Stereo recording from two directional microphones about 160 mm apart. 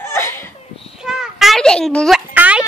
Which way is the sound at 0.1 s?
15° left (ahead or behind).